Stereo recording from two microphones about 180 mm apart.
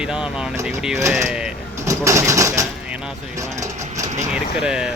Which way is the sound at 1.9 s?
15° right (ahead or behind).